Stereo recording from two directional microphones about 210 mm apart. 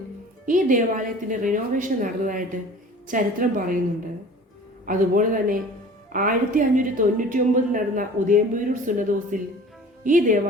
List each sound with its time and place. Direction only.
0.4 s a woman's voice: 40° right (ahead or behind)
4.9 s a woman's voice: 40° right (ahead or behind)